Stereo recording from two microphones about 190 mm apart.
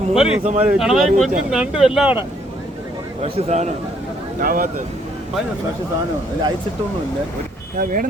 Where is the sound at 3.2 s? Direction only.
35° right (ahead or behind).